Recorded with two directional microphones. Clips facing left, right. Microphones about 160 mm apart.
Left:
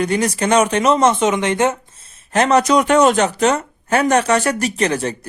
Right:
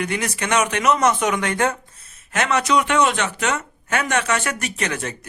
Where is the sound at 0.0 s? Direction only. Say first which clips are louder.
Left 7 dB; 35° left (ahead or behind).